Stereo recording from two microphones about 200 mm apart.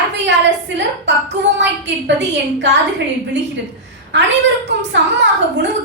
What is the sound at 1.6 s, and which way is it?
A woman's voice, 60° right (ahead or behind).